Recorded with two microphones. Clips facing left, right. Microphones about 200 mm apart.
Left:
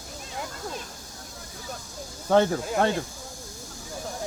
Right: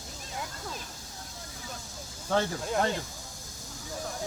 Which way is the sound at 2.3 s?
60° left (ahead or behind).